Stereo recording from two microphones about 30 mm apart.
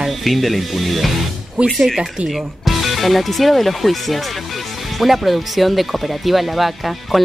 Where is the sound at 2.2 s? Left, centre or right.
Centre.